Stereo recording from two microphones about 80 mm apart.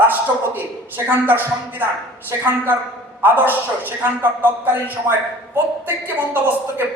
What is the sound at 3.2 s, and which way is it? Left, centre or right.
A woman's voice, right.